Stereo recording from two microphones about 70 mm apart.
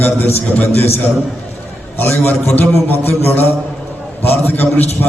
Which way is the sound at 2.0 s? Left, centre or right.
Left.